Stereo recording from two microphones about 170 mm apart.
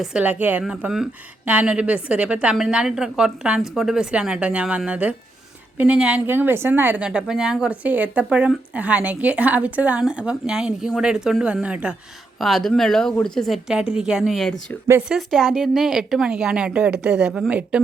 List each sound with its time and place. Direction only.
0.0 s a woman's voice: 5° right (ahead or behind)